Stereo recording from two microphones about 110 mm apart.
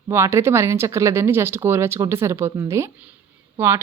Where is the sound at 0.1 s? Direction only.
25° right (ahead or behind).